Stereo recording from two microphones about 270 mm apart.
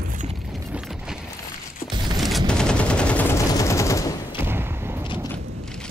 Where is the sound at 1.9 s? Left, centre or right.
Centre.